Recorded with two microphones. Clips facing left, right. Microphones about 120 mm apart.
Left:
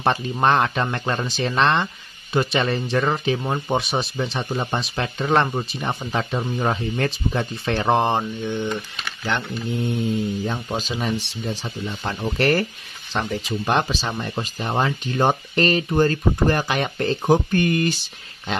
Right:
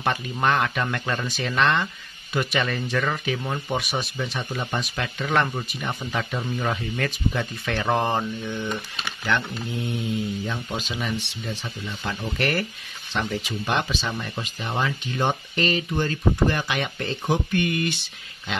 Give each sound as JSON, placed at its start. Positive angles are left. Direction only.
{"t": 0.0, "sound": "speech", "side_deg": 30}